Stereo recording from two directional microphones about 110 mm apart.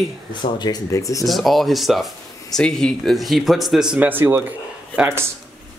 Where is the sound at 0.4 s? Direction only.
40° left (ahead or behind).